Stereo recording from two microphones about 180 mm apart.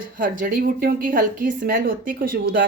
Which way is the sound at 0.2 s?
50° right (ahead or behind).